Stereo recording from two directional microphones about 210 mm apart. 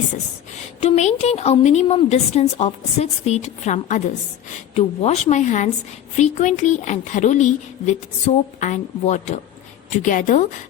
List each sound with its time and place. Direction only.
0.8 s speech: 30° left (ahead or behind)
8.6 s speech: 35° left (ahead or behind)